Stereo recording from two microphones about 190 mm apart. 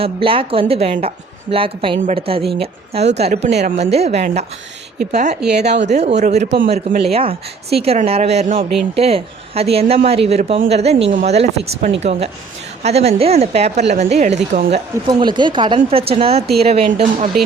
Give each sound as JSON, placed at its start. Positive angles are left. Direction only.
{"t": 0.0, "sound": "a woman's voice", "side_deg": -30}
{"t": 5.4, "sound": "a woman's voice", "side_deg": -60}
{"t": 5.9, "sound": "speech", "side_deg": -35}
{"t": 7.0, "sound": "speech", "side_deg": -30}
{"t": 15.0, "sound": "a woman's voice", "side_deg": -25}